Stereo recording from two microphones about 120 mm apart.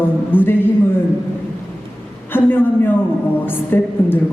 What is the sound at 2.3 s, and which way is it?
A woman's voice, 15° left (ahead or behind).